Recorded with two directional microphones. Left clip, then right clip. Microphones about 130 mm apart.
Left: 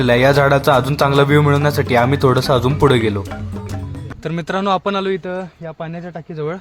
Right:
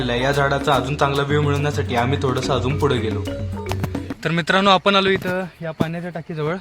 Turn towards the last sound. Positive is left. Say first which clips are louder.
# even
turn(degrees=-15)  # may be behind; listen again after turning